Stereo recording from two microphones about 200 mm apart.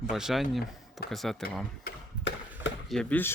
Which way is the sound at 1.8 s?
60° left (ahead or behind).